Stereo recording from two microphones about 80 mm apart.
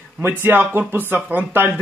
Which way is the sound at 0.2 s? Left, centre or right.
Right.